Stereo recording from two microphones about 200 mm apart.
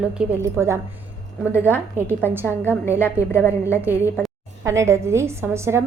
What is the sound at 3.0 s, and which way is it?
Speech, 10° left (ahead or behind).